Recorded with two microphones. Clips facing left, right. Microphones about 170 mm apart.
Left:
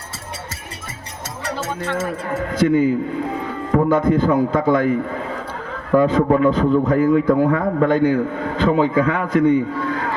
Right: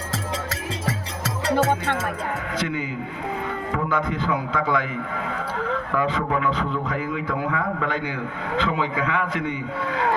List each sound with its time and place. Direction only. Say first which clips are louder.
2.6 s a man's voice: left 15 dB; 45° left (ahead or behind)